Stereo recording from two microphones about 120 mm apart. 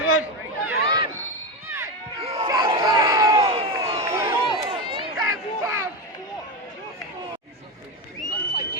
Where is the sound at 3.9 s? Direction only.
25° right (ahead or behind).